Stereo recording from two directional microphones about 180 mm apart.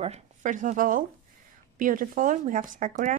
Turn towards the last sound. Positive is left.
turn(degrees=-45)  # may be behind; listen again after turning